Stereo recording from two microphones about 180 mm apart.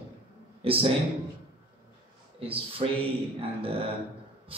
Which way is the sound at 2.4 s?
30° right (ahead or behind).